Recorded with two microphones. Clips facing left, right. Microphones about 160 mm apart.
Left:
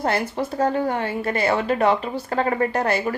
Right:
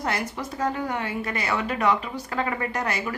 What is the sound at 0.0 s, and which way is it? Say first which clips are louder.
Speech: left 6 dB; 30° left (ahead or behind).